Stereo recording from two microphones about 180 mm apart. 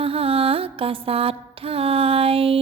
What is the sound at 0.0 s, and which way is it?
Music, 30° right (ahead or behind).